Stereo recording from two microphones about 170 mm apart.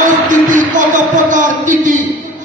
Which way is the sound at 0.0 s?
50° right (ahead or behind).